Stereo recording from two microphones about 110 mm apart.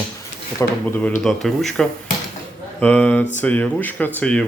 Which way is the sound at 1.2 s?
5° left (ahead or behind).